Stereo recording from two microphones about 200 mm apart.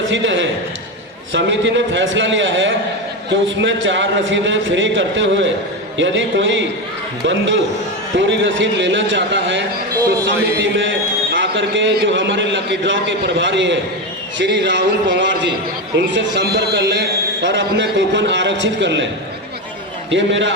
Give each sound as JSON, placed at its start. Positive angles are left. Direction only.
{"t": 0.1, "sound": "a man's voice", "side_deg": -65}
{"t": 11.3, "sound": "a man's voice", "side_deg": -65}
{"t": 20.1, "sound": "a man's voice", "side_deg": -65}